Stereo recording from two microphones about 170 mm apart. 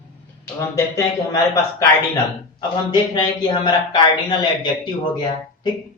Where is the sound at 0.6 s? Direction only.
20° left (ahead or behind).